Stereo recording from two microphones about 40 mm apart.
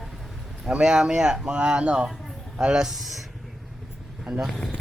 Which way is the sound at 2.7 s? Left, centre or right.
Centre.